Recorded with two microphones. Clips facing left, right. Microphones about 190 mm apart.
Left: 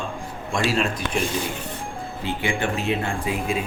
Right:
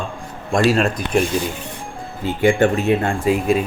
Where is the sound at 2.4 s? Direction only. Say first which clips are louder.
Right 11 dB; 50° right (ahead or behind).